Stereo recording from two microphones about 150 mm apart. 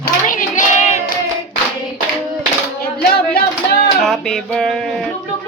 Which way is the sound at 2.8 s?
90° left.